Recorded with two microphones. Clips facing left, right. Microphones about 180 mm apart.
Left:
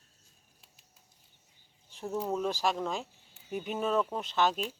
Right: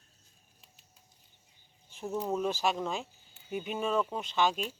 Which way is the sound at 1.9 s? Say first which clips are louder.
Even; centre (ahead or behind).